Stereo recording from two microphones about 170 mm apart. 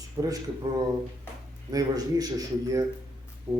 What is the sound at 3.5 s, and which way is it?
Music, 15° right (ahead or behind).